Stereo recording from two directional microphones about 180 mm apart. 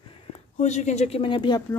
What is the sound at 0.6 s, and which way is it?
Speech, 40° left (ahead or behind).